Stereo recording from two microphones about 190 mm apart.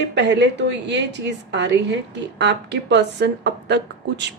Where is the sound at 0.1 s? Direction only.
65° right (ahead or behind).